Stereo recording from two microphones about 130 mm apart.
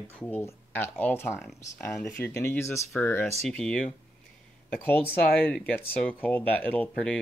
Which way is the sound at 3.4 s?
5° left (ahead or behind).